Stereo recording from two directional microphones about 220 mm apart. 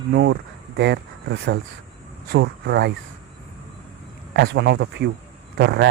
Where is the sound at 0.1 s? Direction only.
55° right (ahead or behind).